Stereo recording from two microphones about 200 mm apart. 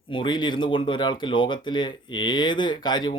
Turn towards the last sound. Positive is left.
turn(degrees=20)  # may be behind; listen again after turning